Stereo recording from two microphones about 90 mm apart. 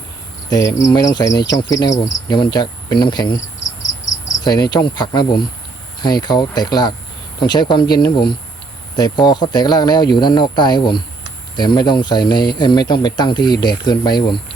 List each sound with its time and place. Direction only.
0.5 s cricket: 35° left (ahead or behind)
1.8 s speech: 55° left (ahead or behind)
4.4 s speech: 50° left (ahead or behind)